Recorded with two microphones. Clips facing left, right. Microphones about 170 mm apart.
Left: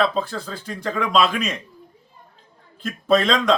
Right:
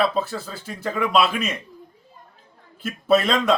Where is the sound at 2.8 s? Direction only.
5° right (ahead or behind).